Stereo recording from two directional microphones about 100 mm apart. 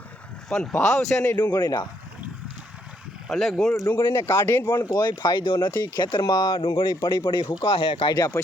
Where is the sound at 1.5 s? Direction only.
40° left (ahead or behind).